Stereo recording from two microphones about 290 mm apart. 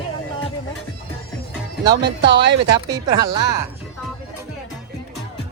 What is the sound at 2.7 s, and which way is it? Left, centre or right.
Speech, centre.